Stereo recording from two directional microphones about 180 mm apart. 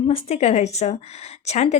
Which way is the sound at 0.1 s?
35° left (ahead or behind).